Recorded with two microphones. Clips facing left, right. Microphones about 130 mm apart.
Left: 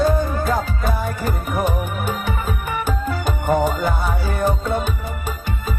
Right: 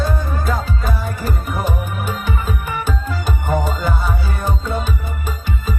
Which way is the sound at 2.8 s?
55° left (ahead or behind).